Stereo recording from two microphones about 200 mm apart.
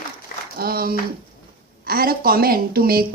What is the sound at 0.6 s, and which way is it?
A woman's voice, 50° right (ahead or behind).